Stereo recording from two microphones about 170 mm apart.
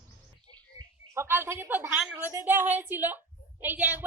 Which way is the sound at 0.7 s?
15° right (ahead or behind).